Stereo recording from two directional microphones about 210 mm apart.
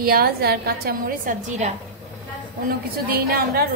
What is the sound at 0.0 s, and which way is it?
A woman's voice, 45° right (ahead or behind).